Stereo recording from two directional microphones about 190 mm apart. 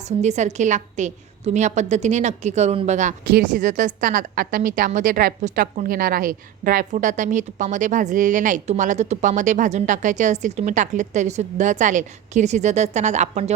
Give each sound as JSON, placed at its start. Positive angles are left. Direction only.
{"t": 0.0, "sound": "a woman's voice", "side_deg": -35}